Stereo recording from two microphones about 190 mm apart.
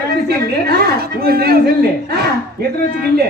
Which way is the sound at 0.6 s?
55° right (ahead or behind).